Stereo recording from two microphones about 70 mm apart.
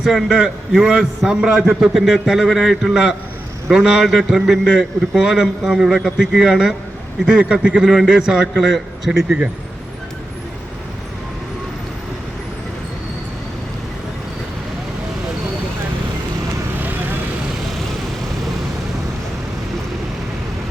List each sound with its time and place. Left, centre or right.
0.0 s a man's voice: centre
7.8 s a man's voice: centre
16.8 s vehicle: right